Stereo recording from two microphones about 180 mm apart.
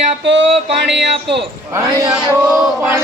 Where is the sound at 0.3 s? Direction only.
80° right.